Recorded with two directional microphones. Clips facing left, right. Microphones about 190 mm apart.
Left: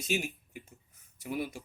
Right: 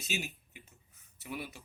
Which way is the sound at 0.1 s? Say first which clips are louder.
Left 6 dB; 45° left (ahead or behind).